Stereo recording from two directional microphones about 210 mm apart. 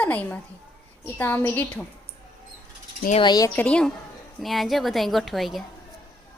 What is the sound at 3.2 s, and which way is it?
Speech, 15° left (ahead or behind).